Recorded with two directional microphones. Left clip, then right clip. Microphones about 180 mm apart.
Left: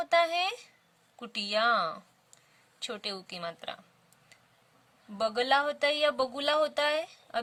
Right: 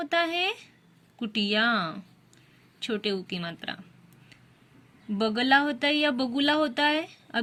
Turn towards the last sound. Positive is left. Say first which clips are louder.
# right 4 dB
turn(degrees=45)  # may be behind; listen again after turning